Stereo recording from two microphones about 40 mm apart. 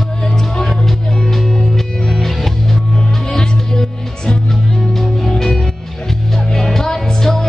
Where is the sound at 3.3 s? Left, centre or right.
Centre.